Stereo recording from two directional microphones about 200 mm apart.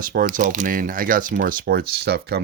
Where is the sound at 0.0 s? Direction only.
45° right (ahead or behind).